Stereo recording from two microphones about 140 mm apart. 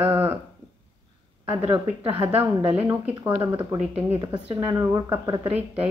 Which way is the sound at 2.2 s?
15° right (ahead or behind).